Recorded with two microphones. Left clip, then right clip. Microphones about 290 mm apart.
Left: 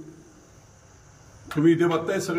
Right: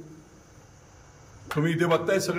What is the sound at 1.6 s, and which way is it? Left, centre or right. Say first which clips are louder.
Speech: left 3 dB; centre.